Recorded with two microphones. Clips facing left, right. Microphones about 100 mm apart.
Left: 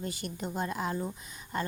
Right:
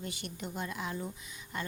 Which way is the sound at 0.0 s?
40° left (ahead or behind).